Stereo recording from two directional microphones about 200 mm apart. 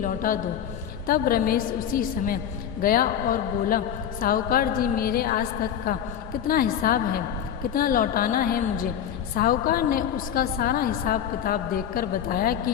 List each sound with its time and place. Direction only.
0.0 s a woman's voice: 45° left (ahead or behind)